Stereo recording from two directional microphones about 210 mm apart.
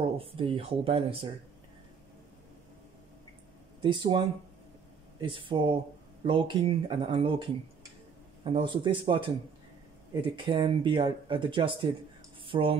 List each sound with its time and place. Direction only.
0.2 s speech: 25° right (ahead or behind)
3.8 s speech: 25° right (ahead or behind)
5.2 s speech: 25° right (ahead or behind)
8.5 s speech: 25° right (ahead or behind)
10.4 s speech: 25° right (ahead or behind)
12.4 s cutlery: 25° right (ahead or behind)